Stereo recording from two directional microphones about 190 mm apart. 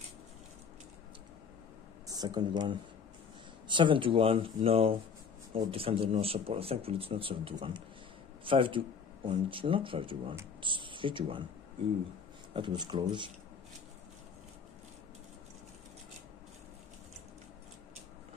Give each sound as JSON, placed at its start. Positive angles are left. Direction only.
{"t": 2.0, "sound": "speech", "side_deg": -20}
{"t": 12.5, "sound": "speech", "side_deg": -25}